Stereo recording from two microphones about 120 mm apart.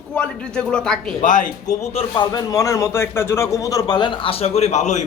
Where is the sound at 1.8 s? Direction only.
55° left (ahead or behind).